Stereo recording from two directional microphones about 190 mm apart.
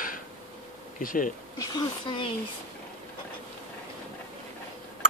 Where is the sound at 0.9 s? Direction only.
45° left (ahead or behind).